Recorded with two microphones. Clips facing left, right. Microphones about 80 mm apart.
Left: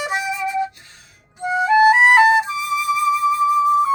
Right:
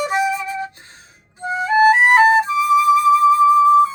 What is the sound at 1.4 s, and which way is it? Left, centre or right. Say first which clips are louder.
Music: even; right.